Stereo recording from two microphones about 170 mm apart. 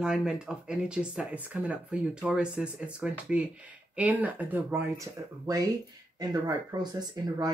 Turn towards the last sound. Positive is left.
turn(degrees=-20)  # may be behind; listen again after turning